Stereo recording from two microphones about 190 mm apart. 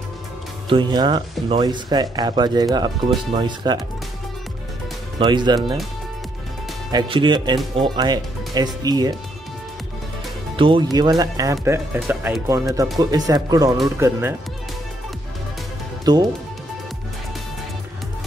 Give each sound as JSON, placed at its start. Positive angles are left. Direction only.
{"t": 0.7, "sound": "speech", "side_deg": -25}
{"t": 5.2, "sound": "speech", "side_deg": -25}
{"t": 6.9, "sound": "speech", "side_deg": -25}
{"t": 10.5, "sound": "speech", "side_deg": -25}
{"t": 16.1, "sound": "speech", "side_deg": -20}